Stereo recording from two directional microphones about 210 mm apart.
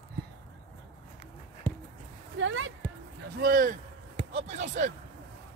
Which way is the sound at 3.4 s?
40° right (ahead or behind).